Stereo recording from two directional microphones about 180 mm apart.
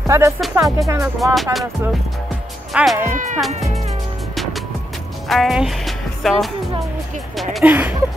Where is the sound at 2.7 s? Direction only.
Centre (ahead or behind).